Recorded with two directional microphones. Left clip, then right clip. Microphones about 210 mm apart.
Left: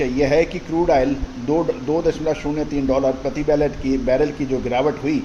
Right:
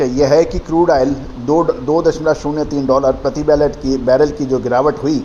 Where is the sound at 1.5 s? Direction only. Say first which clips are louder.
Right 6 dB; 25° right (ahead or behind).